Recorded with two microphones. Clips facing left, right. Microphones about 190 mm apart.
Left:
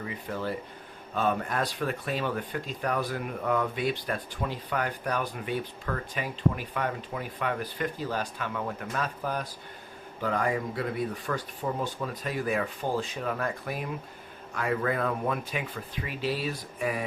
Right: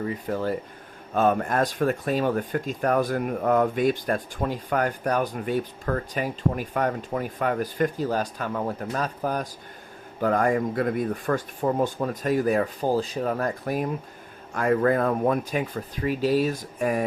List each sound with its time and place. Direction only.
0.0 s speech: 45° right (ahead or behind)